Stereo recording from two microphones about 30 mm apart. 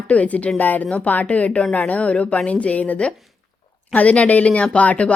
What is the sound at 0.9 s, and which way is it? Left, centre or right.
Speech, left.